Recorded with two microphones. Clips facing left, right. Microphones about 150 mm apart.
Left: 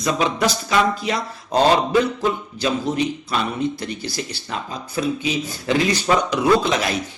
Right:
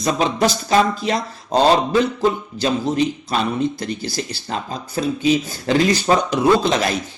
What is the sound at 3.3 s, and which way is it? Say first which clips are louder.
Speech: right 2 dB; 35° right (ahead or behind).